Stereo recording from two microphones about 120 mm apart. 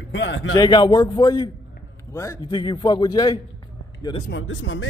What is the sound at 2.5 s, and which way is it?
Speech, 40° left (ahead or behind).